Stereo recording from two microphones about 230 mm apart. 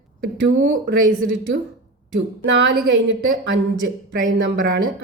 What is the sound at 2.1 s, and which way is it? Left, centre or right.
Speech, right.